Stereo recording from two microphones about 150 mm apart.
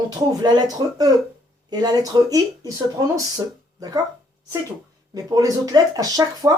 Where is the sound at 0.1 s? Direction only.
25° right (ahead or behind).